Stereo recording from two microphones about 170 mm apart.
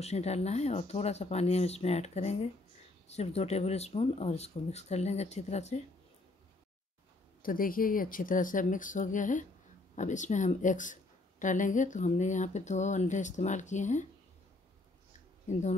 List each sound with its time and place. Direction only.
0.0 s speech: 40° left (ahead or behind)
7.4 s speech: 55° left (ahead or behind)